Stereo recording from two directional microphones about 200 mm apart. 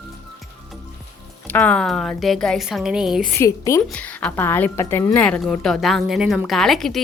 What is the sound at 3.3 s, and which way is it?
Speech, 15° left (ahead or behind).